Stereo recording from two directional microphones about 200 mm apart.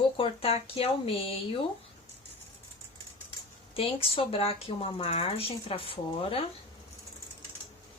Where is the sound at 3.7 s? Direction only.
30° left (ahead or behind).